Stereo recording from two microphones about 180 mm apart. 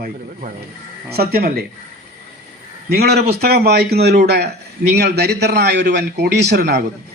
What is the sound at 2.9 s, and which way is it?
A man's voice, 65° right (ahead or behind).